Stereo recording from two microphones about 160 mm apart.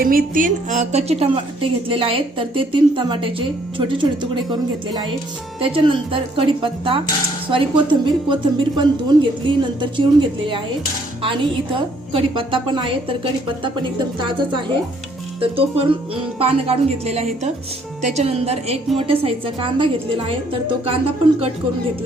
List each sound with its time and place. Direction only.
0.0 s a woman's voice: 65° right (ahead or behind); by 4.4 s 30° right (ahead or behind)
5.5 s a woman's voice: 35° right (ahead or behind)
14.2 s a woman's voice: 30° right (ahead or behind)